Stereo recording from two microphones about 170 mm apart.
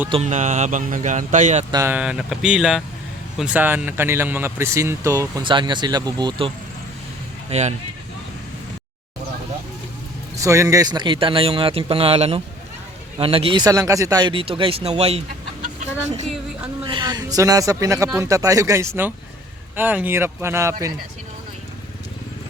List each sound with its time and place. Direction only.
0.1 s speech: 40° right (ahead or behind)
1.7 s speech: 15° right (ahead or behind)
2.0 s speech: 5° right (ahead or behind); by 6.5 s 30° right (ahead or behind)
7.5 s speech: 40° right (ahead or behind)
10.3 s speech: 20° right (ahead or behind); by 15.2 s 35° right (ahead or behind)
16.8 s a man's voice: 25° right (ahead or behind)